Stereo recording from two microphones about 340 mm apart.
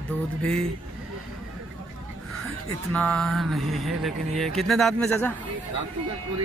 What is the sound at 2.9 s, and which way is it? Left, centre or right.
A man's voice, centre.